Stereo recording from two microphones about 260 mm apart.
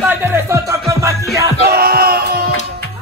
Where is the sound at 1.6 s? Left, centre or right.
Right.